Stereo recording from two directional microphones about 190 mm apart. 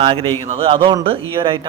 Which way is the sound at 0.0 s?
30° right (ahead or behind).